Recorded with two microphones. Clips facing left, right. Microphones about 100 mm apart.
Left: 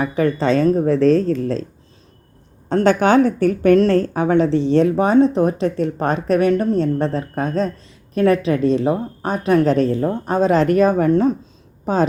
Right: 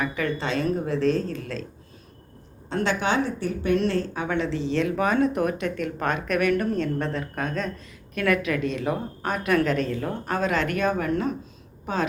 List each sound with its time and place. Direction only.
0.0 s speech: 35° left (ahead or behind)
2.6 s a woman's voice: 45° left (ahead or behind)
3.8 s speech: 45° left (ahead or behind)